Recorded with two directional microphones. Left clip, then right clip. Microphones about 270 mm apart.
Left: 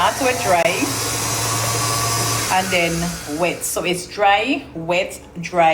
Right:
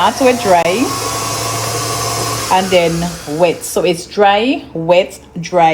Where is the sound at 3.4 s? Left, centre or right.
Right.